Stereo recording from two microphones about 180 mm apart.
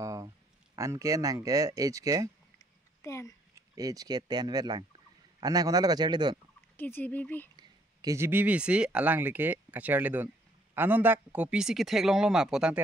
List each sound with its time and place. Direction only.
0.0 s a sound: 20° right (ahead or behind)
0.7 s speech: 20° right (ahead or behind)
3.0 s speech: 15° left (ahead or behind)
3.5 s speech: 20° right (ahead or behind)
6.8 s speech: 10° left (ahead or behind)
7.5 s speech: 20° right (ahead or behind); by 12.8 s 5° right (ahead or behind)